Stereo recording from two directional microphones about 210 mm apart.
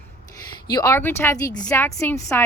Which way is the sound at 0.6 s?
15° left (ahead or behind).